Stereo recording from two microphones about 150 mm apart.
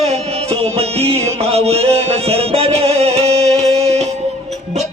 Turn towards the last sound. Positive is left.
turn(degrees=-45)  # may be behind; listen again after turning